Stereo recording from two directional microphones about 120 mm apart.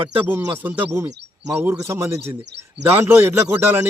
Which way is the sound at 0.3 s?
20° right (ahead or behind).